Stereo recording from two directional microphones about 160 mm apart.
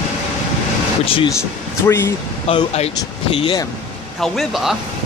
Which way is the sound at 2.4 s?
40° left (ahead or behind).